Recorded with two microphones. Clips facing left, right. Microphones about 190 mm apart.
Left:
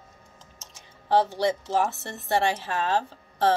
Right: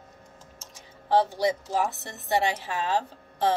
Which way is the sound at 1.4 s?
15° right (ahead or behind).